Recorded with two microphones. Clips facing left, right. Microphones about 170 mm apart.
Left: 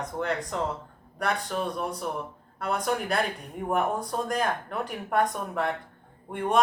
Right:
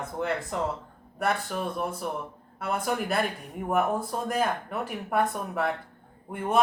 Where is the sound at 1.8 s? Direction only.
5° right (ahead or behind).